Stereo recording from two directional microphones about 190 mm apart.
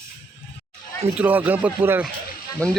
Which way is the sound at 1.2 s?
10° right (ahead or behind).